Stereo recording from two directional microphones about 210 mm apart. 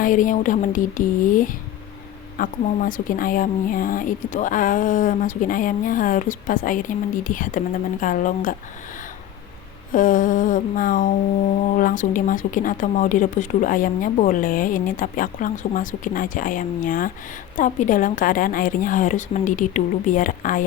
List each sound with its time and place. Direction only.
0.0 s speech: 40° left (ahead or behind)
9.9 s speech: 40° left (ahead or behind)